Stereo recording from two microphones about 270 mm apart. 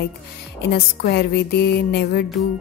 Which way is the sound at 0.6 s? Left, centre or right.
Left.